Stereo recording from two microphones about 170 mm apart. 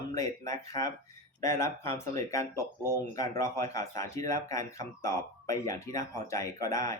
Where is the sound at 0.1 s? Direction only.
20° left (ahead or behind).